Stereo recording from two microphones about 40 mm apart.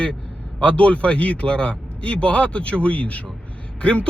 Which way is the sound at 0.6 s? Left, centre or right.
Left.